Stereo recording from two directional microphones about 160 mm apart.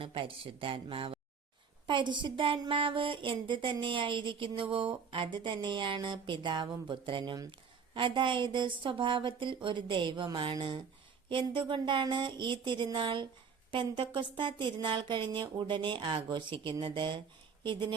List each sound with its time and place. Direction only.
0.0 s speech: 35° right (ahead or behind)